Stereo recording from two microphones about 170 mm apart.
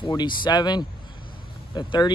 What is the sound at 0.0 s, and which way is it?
Speech, 25° left (ahead or behind).